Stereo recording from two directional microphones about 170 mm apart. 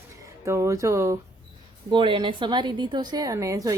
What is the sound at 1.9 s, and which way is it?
A woman's voice, 30° right (ahead or behind).